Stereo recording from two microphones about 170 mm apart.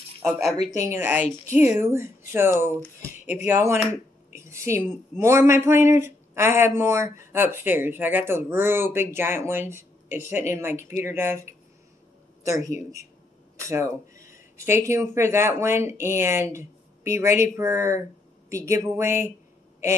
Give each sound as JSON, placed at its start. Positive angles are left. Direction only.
{"t": 0.7, "sound": "speech", "side_deg": -15}